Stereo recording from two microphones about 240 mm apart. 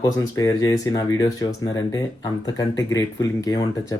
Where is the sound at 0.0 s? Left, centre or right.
Centre.